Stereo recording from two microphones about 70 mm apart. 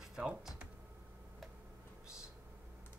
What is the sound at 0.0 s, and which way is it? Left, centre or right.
Computer keyboard, centre.